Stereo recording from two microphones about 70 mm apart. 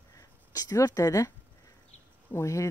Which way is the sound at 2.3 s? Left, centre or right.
Left.